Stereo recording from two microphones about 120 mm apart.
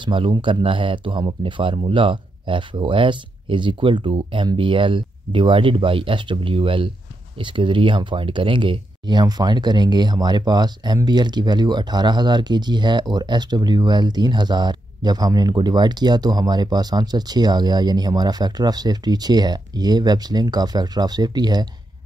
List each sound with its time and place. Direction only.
0.0 s speech: 45° right (ahead or behind)